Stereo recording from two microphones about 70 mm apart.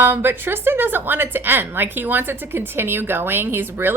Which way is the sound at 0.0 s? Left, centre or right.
Right.